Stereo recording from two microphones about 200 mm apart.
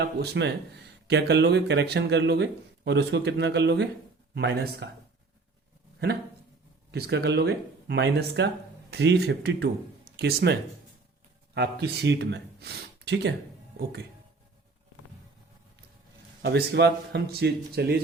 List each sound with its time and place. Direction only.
0.0 s speech: 60° right (ahead or behind)
6.9 s speech: 55° right (ahead or behind)
16.4 s speech: 55° right (ahead or behind)